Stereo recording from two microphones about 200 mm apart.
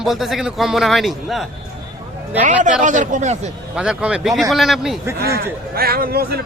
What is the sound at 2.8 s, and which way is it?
Speech, 40° right (ahead or behind).